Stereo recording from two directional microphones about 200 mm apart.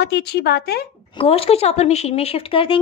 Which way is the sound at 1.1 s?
30° left (ahead or behind).